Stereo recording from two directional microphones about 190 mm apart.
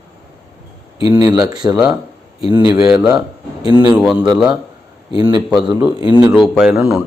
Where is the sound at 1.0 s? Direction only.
20° right (ahead or behind).